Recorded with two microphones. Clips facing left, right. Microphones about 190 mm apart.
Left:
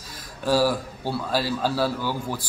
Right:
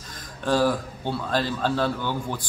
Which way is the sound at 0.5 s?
5° left (ahead or behind).